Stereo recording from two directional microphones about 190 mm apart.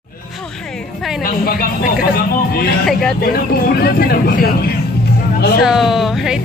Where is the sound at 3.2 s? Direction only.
55° left (ahead or behind).